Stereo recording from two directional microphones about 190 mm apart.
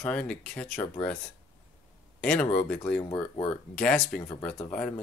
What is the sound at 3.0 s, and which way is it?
Speech, 20° left (ahead or behind).